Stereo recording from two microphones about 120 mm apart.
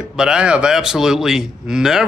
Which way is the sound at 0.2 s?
5° right (ahead or behind).